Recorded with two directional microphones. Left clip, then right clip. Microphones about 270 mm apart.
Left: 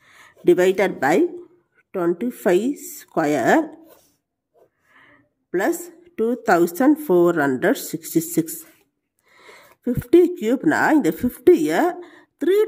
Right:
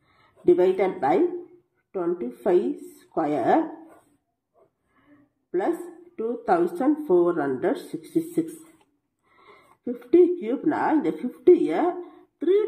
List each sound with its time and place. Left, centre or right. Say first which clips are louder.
0.1 s speech: left 3 dB; left
6.1 s speech: left 5 dB; left